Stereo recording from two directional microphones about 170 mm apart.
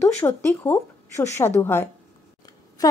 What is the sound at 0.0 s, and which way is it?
A woman's voice, 15° left (ahead or behind).